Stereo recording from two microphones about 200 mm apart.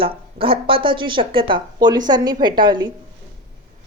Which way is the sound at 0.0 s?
25° right (ahead or behind).